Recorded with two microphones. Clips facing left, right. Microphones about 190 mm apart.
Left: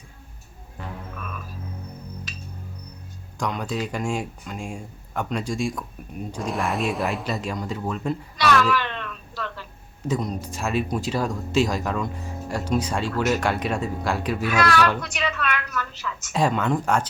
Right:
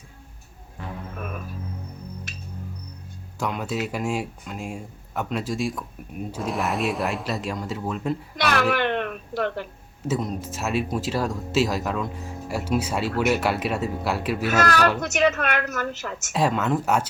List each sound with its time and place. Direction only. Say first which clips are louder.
3.3 s speech: even; 5° right (ahead or behind)
8.4 s music: left 1 dB; 55° right (ahead or behind)
10.1 s speech: even; 5° right (ahead or behind)
14.4 s a woman's voice: even; 40° right (ahead or behind)
16.3 s speech: even; centre (ahead or behind)